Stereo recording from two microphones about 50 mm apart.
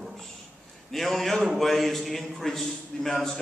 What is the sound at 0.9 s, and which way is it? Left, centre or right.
A man's voice, centre.